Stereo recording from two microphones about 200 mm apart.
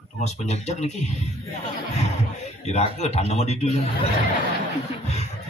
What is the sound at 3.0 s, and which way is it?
Speech, 35° left (ahead or behind).